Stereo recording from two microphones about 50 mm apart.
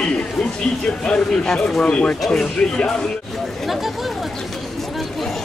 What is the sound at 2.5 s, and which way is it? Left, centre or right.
Speech, left.